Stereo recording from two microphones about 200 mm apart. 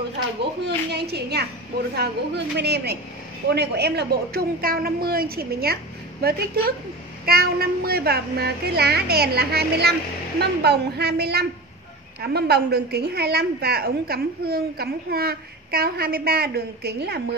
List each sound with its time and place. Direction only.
0.4 s a woman's voice: 55° right (ahead or behind)